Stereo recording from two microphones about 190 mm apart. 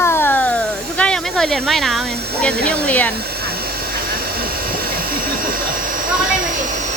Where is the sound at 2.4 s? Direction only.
5° left (ahead or behind).